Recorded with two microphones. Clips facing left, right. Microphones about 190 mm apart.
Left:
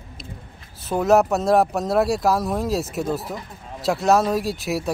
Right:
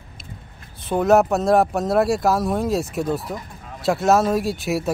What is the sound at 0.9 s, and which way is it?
Speech, centre (ahead or behind).